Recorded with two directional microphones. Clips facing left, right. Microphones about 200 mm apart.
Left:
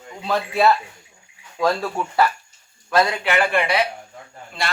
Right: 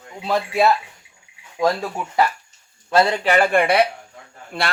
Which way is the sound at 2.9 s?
30° right (ahead or behind).